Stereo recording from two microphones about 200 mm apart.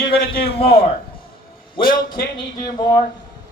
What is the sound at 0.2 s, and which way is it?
A man's voice, 50° left (ahead or behind).